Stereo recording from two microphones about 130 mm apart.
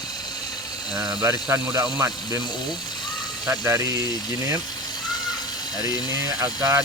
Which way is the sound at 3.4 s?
20° right (ahead or behind).